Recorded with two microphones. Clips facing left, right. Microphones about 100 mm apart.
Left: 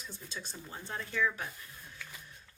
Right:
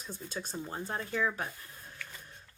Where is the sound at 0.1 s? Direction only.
45° right (ahead or behind).